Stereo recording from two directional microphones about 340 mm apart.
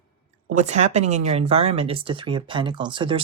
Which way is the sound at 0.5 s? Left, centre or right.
Centre.